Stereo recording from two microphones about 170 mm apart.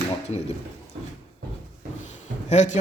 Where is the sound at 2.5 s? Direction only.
45° left (ahead or behind).